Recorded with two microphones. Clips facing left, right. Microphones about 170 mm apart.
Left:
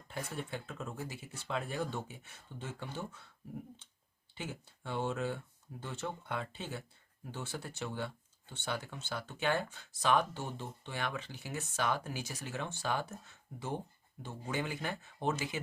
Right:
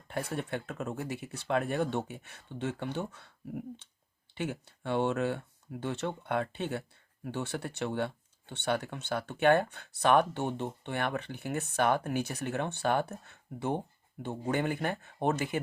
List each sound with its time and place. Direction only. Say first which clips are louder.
0.1 s speech: right 6 dB; 65° right (ahead or behind)